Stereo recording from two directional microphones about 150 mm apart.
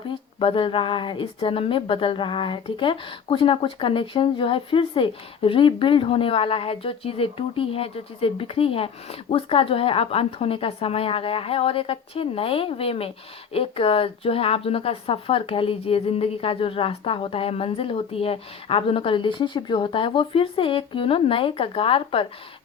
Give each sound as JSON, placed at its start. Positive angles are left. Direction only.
{"t": 0.1, "sound": "a woman's voice", "side_deg": 35}